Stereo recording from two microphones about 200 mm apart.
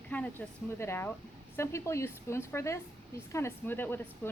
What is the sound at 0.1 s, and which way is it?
Speech, 10° left (ahead or behind).